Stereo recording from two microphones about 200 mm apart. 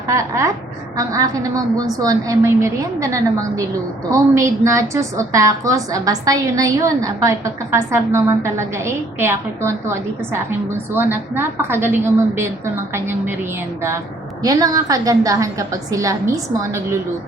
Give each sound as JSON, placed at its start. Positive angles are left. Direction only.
{"t": 0.1, "sound": "a woman's voice", "side_deg": -15}
{"t": 14.4, "sound": "a woman's voice", "side_deg": -20}